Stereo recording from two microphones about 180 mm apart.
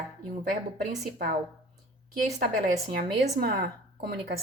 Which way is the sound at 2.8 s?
60° right (ahead or behind).